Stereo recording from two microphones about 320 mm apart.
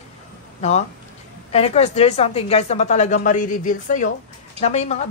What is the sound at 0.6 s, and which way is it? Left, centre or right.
A woman's voice, left.